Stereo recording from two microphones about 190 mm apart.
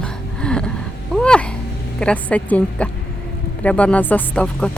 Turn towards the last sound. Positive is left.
turn(degrees=5)  # may be behind; listen again after turning